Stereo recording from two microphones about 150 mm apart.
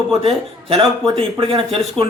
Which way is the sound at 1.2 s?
40° right (ahead or behind).